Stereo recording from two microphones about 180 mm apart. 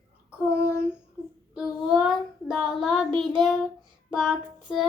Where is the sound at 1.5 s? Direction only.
Centre (ahead or behind).